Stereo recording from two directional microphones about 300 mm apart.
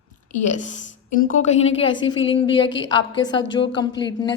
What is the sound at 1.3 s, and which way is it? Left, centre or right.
A woman's voice, left.